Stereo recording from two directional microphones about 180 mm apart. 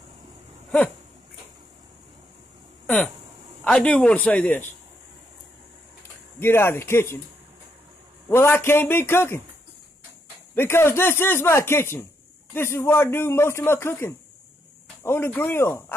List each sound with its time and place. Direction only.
0.7 s a sound: 5° left (ahead or behind)
3.6 s speech: 5° left (ahead or behind)
6.4 s speech: 15° left (ahead or behind)
8.3 s speech: 10° left (ahead or behind)
10.5 s speech: 15° left (ahead or behind)